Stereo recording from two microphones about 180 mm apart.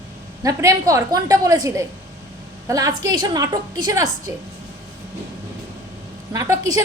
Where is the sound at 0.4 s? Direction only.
20° right (ahead or behind).